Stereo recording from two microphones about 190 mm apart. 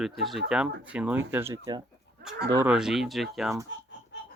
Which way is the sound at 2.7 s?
Centre (ahead or behind).